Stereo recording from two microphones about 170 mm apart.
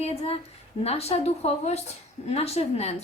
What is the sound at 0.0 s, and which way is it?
A woman's voice, 35° left (ahead or behind).